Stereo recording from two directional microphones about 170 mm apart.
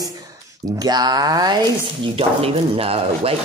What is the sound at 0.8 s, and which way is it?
Speech, 25° right (ahead or behind).